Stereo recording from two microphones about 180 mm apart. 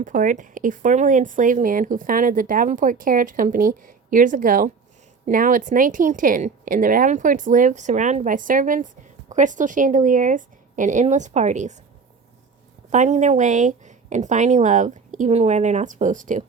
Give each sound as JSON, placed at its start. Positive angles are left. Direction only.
{"t": 0.0, "sound": "speech", "side_deg": -45}
{"t": 12.9, "sound": "speech", "side_deg": -40}